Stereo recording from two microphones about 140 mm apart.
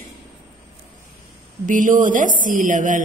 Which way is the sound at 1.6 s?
65° right (ahead or behind).